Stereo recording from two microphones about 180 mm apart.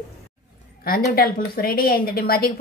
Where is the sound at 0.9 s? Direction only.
55° left (ahead or behind).